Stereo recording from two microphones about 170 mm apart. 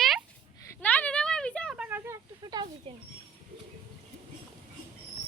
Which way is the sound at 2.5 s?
20° right (ahead or behind).